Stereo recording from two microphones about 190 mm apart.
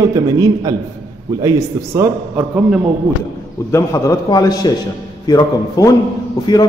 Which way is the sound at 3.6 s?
15° left (ahead or behind).